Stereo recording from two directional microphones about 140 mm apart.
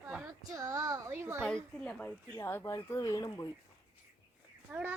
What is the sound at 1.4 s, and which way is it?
Speech, 5° left (ahead or behind).